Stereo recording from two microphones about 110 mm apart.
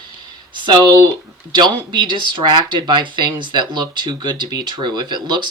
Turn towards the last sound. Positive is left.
turn(degrees=-45)  # may be behind; listen again after turning